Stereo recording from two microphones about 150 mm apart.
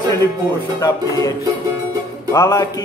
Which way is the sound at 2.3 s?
20° left (ahead or behind).